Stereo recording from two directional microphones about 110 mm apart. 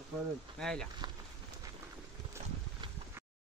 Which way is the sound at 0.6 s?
5° left (ahead or behind).